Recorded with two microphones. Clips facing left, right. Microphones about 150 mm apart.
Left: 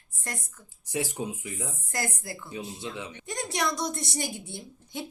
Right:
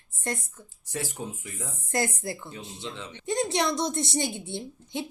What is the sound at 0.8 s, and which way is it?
Speech, 15° left (ahead or behind).